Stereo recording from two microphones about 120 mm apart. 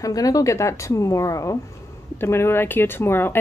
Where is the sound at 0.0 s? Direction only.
30° left (ahead or behind).